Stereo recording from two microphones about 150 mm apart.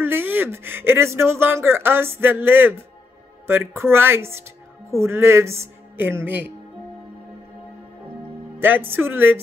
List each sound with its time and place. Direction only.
0.0 s speech: 15° right (ahead or behind)
8.5 s speech: 15° right (ahead or behind)